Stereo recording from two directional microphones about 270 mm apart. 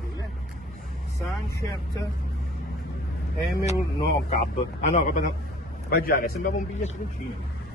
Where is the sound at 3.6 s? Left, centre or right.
Left.